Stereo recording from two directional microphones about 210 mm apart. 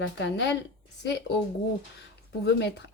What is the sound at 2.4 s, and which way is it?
Speech, 55° left (ahead or behind).